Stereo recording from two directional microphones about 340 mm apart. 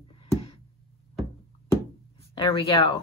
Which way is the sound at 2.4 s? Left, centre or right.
Centre.